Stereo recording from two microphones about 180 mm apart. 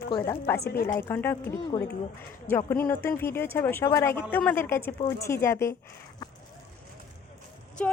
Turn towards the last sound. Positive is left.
turn(degrees=10)  # may be behind; listen again after turning